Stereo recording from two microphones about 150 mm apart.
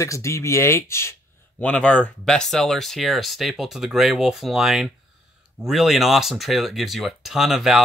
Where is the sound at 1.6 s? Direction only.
5° left (ahead or behind).